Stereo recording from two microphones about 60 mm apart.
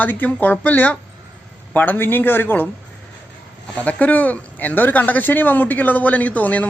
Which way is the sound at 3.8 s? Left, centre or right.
Left.